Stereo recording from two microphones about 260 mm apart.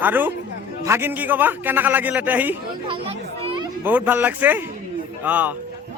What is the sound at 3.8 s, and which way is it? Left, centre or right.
A man's voice, centre.